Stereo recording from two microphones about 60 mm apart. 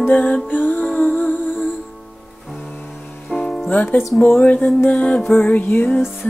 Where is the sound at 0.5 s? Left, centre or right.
Left.